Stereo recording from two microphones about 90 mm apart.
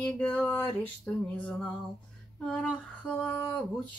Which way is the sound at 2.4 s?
5° left (ahead or behind).